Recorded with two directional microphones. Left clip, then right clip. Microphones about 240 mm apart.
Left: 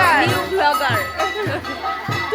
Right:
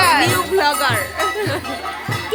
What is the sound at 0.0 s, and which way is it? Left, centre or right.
Music, centre.